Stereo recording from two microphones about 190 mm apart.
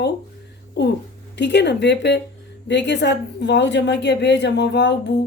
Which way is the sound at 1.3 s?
65° left (ahead or behind).